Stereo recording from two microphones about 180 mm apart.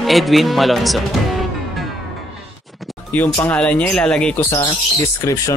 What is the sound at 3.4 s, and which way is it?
Speech, 10° left (ahead or behind).